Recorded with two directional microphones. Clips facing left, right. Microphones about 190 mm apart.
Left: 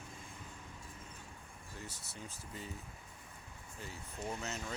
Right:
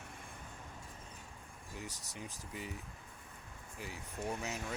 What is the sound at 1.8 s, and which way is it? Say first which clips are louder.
Speech: right 2 dB; 15° right (ahead or behind).